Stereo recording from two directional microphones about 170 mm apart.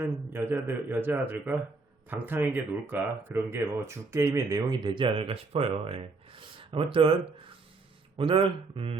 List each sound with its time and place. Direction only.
0.3 s speech: 10° right (ahead or behind); by 9.0 s 30° right (ahead or behind)